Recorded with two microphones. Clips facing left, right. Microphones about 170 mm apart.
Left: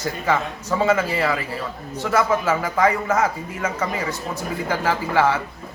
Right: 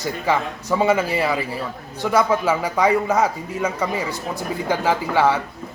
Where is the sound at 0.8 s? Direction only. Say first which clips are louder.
Right 1 dB; 15° right (ahead or behind).